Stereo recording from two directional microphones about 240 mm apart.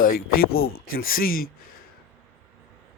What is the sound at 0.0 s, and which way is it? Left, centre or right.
Speech, left.